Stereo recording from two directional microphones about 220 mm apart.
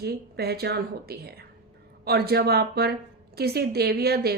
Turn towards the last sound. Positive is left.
turn(degrees=-45)  # may be behind; listen again after turning